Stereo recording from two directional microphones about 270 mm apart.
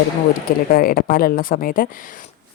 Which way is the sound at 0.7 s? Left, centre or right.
Left.